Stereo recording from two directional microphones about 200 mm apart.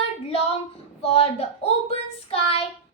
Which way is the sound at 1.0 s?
30° left (ahead or behind).